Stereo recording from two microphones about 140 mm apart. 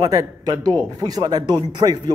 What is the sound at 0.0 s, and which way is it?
Speech, 25° right (ahead or behind).